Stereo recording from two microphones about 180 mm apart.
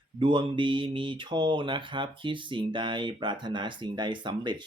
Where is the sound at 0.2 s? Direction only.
25° right (ahead or behind).